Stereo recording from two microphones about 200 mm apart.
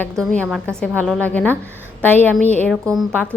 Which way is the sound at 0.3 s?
5° left (ahead or behind).